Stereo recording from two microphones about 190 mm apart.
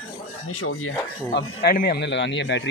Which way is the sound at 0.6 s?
90° left.